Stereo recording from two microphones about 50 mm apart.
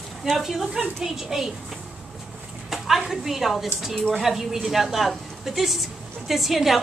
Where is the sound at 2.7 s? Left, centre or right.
Centre.